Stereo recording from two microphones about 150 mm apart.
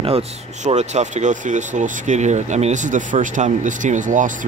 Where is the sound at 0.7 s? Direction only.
50° right (ahead or behind).